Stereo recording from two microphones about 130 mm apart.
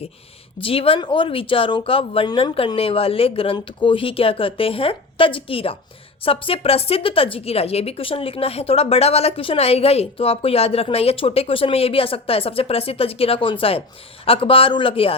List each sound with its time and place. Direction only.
0.6 s a woman's voice: 45° left (ahead or behind)